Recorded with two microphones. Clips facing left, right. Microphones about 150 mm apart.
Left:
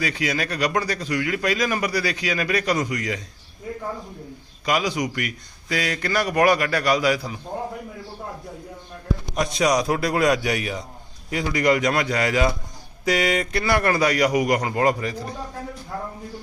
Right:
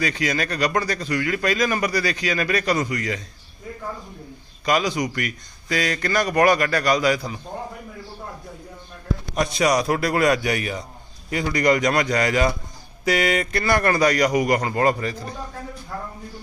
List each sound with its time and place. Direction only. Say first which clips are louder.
0.0 s speech: right 1 dB; 10° left (ahead or behind)
4.6 s speech: right 1 dB; 10° left (ahead or behind)
9.3 s a man's voice: right 1 dB; centre (ahead or behind); by 16.1 s 15° left (ahead or behind)